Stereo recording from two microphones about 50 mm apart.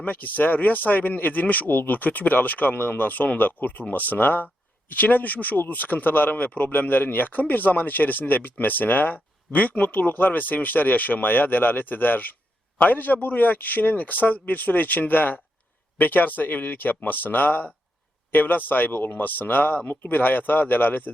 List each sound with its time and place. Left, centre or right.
0.0 s speech: left